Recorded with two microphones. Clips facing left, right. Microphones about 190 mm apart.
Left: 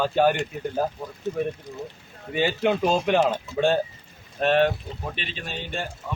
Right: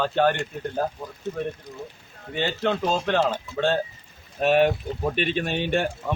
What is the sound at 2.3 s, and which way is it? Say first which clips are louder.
Speech: left 2 dB; 10° left (ahead or behind).